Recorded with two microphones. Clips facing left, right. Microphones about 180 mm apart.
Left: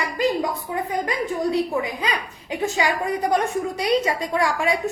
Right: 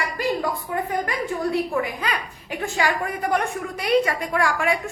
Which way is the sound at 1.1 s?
20° left (ahead or behind).